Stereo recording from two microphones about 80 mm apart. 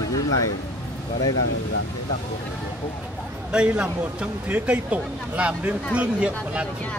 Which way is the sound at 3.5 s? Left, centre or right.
Centre.